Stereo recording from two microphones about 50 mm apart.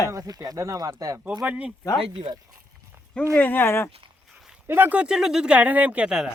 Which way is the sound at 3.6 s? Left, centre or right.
Left.